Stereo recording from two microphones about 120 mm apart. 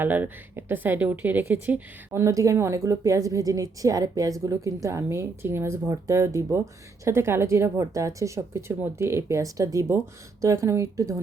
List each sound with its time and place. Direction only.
0.0 s a woman's voice: 15° right (ahead or behind)